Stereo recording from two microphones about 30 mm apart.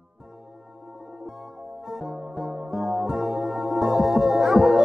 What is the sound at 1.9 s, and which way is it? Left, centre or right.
Music, centre.